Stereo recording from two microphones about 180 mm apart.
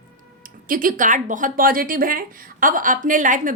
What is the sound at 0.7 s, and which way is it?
Speech, 50° right (ahead or behind).